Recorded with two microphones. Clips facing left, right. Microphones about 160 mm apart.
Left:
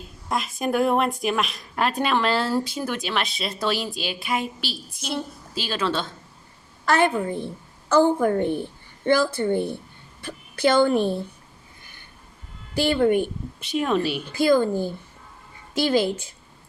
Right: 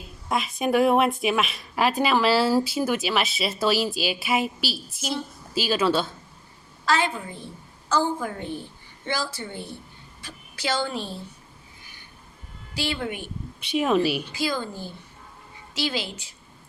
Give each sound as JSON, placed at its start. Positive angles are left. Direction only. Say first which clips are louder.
{"t": 0.3, "sound": "a woman's voice", "louder": "right 1 dB", "side_deg": 0}
{"t": 6.8, "sound": "a woman's voice", "louder": "left 4 dB", "side_deg": 55}
{"t": 12.7, "sound": "speech", "louder": "left 10 dB", "side_deg": 50}
{"t": 13.6, "sound": "a woman's voice", "louder": "right 1 dB", "side_deg": 0}
{"t": 14.3, "sound": "speech", "louder": "left 10 dB", "side_deg": 50}